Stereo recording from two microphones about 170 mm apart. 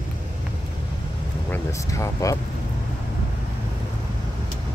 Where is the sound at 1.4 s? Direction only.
15° left (ahead or behind).